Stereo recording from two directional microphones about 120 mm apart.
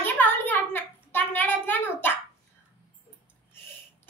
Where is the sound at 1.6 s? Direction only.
15° left (ahead or behind).